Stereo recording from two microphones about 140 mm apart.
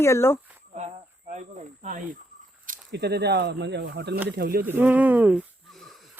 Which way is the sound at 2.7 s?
75° right (ahead or behind).